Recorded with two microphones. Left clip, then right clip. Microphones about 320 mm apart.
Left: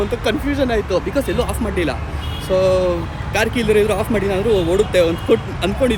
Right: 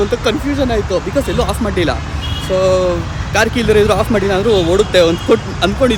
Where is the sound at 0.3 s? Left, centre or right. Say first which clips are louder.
Right 3 dB; centre.